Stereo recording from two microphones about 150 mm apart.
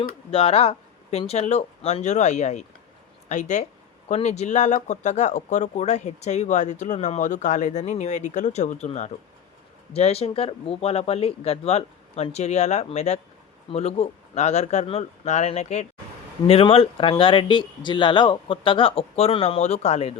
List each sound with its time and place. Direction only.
0.3 s speech: 40° left (ahead or behind)